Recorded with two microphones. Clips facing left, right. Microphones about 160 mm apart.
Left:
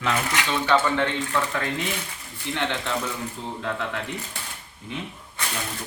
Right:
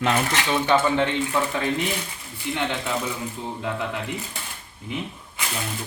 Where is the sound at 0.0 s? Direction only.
30° right (ahead or behind).